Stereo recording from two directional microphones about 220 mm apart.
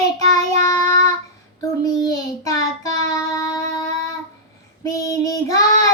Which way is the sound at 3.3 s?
15° left (ahead or behind).